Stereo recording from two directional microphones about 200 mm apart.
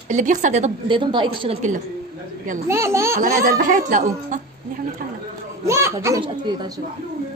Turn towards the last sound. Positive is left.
turn(degrees=-20)  # may be behind; listen again after turning